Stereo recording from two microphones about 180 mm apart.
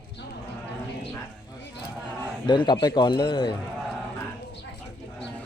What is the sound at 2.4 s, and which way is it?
Speech, 25° left (ahead or behind).